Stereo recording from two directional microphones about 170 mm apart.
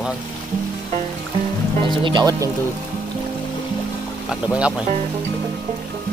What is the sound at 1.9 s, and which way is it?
Speech, 25° right (ahead or behind).